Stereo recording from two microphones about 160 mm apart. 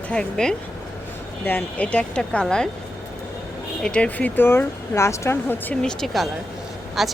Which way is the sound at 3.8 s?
5° left (ahead or behind).